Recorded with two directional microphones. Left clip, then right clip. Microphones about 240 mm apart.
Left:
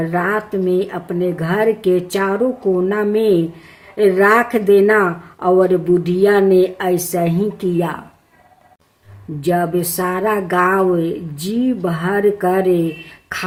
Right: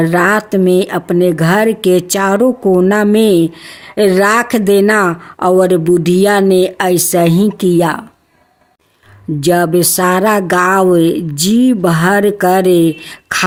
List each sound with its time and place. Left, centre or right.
0.0 s speech: right
9.4 s speech: right